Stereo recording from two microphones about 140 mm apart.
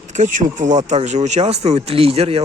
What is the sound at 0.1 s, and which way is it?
Speech, 60° right (ahead or behind).